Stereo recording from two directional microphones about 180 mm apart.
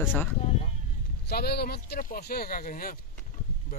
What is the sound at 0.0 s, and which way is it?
Speech, 10° left (ahead or behind).